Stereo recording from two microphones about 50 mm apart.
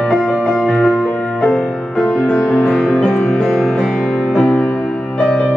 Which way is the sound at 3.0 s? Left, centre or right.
Left.